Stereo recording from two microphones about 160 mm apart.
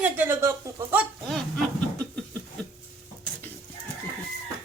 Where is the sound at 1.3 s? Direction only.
Centre (ahead or behind).